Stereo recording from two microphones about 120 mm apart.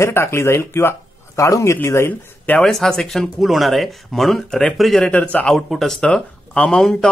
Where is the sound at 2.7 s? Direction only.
5° left (ahead or behind).